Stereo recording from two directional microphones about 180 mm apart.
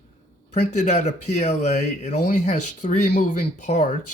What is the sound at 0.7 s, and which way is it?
Speech, 40° left (ahead or behind).